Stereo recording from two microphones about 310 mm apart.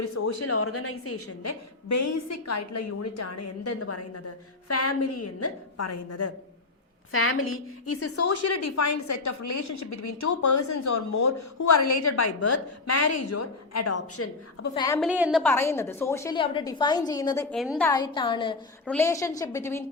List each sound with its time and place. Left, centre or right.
0.0 s a woman's voice: left
1.9 s a woman's voice: left
12.5 s a woman's voice: left
14.8 s a woman's voice: centre
15.0 s a woman's voice: centre
17.5 s a woman's voice: centre